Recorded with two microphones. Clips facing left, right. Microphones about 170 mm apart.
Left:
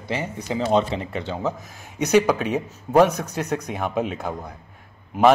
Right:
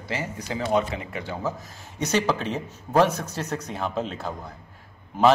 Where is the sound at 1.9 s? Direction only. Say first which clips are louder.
Left 6 dB; 15° left (ahead or behind).